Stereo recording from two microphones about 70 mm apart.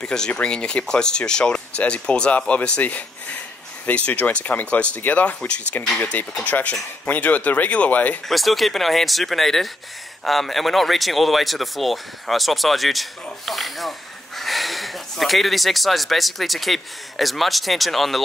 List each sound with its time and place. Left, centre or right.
0.0 s speech: centre
8.3 s speech: centre